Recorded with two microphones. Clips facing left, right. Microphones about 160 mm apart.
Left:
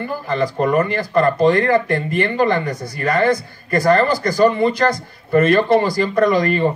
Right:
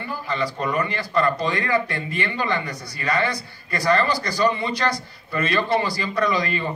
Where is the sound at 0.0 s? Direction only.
50° left (ahead or behind).